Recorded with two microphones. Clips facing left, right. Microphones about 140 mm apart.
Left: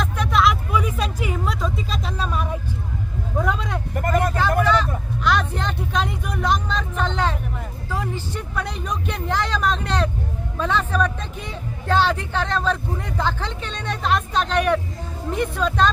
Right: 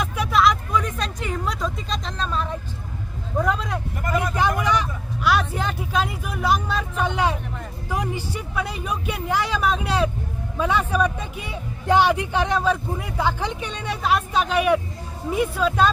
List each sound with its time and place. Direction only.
0.0 s vehicle: 5° right (ahead or behind); by 2.6 s 10° left (ahead or behind)
3.3 s vehicle: centre (ahead or behind)
4.4 s vehicle: 15° right (ahead or behind)
7.9 s speech: 15° right (ahead or behind)